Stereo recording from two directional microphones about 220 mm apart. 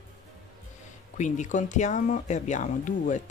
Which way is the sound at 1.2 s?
35° left (ahead or behind).